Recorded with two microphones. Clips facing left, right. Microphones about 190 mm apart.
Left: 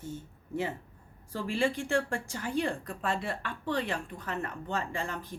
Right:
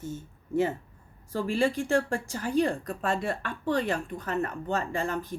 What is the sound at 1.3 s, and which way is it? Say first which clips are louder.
Speech: right 4 dB; 40° right (ahead or behind).